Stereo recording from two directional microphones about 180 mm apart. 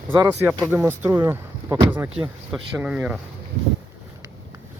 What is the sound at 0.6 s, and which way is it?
Speech, 5° right (ahead or behind).